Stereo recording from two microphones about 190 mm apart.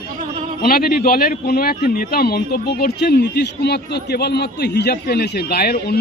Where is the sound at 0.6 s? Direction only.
50° left (ahead or behind).